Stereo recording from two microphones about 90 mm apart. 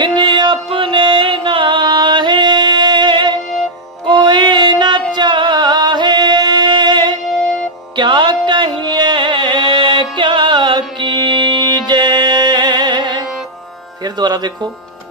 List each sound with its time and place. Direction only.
0.0 s music: 60° right (ahead or behind)
14.0 s speech: 50° right (ahead or behind)